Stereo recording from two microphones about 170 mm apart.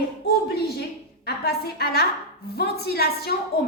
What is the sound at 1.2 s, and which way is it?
A woman's voice, 70° left (ahead or behind).